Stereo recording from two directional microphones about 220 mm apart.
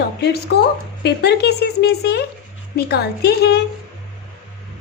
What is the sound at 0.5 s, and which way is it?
A woman's voice, 55° left (ahead or behind).